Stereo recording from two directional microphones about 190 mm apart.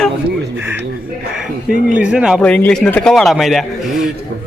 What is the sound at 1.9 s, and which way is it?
Speech, 5° right (ahead or behind).